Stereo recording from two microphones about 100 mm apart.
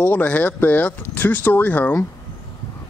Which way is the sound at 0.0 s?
20° left (ahead or behind).